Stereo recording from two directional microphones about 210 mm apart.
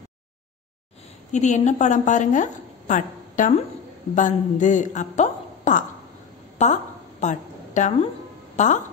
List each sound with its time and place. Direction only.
1.3 s a woman's voice: 35° left (ahead or behind)
6.6 s a sound: 35° left (ahead or behind)
8.5 s speech: 35° left (ahead or behind)